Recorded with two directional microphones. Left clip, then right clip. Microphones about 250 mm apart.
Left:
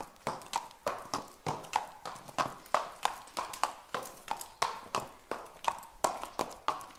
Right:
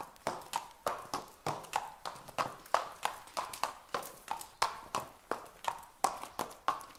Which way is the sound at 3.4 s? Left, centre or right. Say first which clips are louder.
Left 1 dB; centre.